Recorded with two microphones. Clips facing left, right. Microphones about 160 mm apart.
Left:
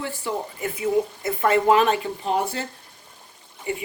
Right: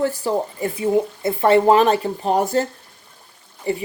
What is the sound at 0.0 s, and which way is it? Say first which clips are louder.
Speech: right 8 dB; 40° right (ahead or behind).